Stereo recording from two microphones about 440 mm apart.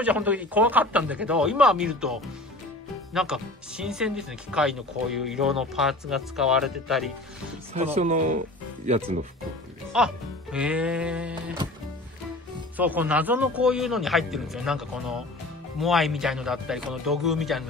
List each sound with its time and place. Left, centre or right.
0.0 s speech: centre
7.7 s speech: centre
9.9 s speech: centre
12.7 s speech: centre